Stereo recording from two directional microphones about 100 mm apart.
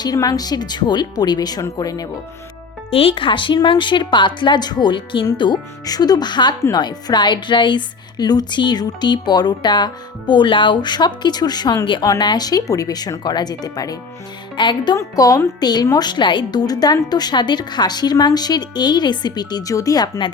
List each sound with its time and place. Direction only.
0.0 s speech: 40° left (ahead or behind)
2.9 s speech: 70° left (ahead or behind); by 13.9 s 40° left (ahead or behind)
14.5 s speech: 50° left (ahead or behind)
14.9 s speech: 35° left (ahead or behind)